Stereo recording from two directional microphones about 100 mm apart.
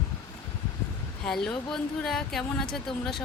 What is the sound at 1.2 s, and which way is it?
Speech, 5° left (ahead or behind).